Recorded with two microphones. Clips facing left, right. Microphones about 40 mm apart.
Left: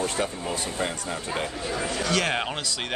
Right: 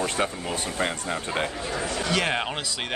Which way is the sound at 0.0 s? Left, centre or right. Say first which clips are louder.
Right 1 dB; right.